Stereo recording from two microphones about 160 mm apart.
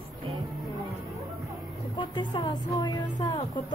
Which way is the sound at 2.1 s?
25° left (ahead or behind).